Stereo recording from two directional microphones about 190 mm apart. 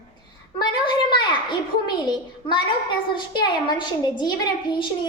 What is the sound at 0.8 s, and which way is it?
Speech, 25° left (ahead or behind).